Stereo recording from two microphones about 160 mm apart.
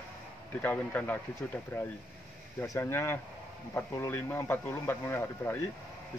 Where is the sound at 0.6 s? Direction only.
15° left (ahead or behind).